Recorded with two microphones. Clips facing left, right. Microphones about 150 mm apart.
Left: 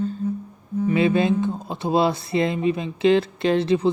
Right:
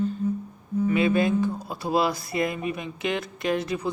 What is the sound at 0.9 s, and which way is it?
Speech, 25° left (ahead or behind).